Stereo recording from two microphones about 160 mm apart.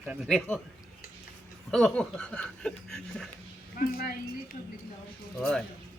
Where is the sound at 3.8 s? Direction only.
65° left (ahead or behind).